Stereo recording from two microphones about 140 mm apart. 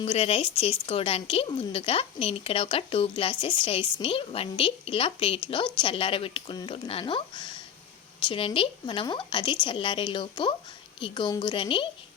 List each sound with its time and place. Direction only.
0.0 s a woman's voice: 45° left (ahead or behind)